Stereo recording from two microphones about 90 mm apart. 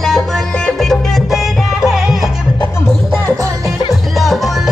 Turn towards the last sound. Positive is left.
turn(degrees=0)  # may be behind; listen again after turning